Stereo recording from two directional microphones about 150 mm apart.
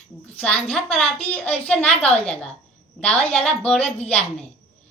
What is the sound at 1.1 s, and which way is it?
Speech, 40° left (ahead or behind).